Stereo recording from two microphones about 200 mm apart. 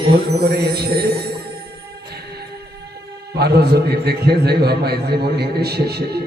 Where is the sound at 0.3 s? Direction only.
50° right (ahead or behind).